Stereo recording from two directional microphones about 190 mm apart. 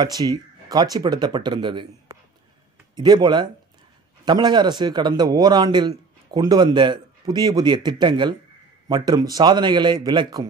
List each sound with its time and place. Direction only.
0.0 s a man's voice: 20° right (ahead or behind)
3.0 s a man's voice: 20° right (ahead or behind)